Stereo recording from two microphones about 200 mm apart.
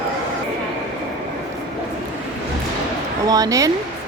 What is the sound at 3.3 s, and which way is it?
Speech, 15° right (ahead or behind).